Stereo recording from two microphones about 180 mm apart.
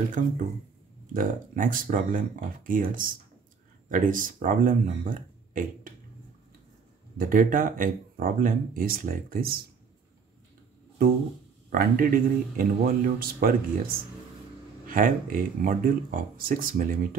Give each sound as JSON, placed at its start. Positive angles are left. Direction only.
{"t": 0.2, "sound": "speech", "side_deg": -45}
{"t": 7.2, "sound": "speech", "side_deg": -50}
{"t": 11.7, "sound": "speech", "side_deg": -55}